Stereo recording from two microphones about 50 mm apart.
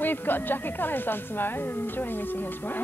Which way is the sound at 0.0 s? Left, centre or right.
Left.